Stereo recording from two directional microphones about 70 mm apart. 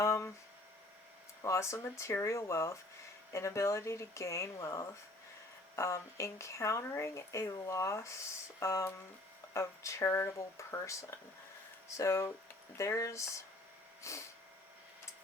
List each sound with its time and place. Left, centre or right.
0.0 s a sound: left
1.4 s speech: left
11.9 s speech: left